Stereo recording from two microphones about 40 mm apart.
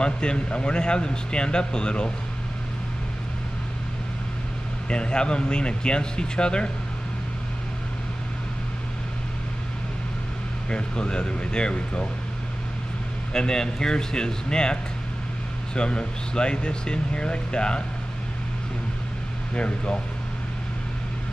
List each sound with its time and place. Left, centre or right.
0.0 s a man's voice: left
4.8 s a man's voice: left
10.7 s a man's voice: left
13.3 s a man's voice: centre
19.5 s speech: left